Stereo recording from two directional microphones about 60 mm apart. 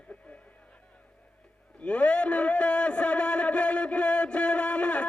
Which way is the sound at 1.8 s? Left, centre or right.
Centre.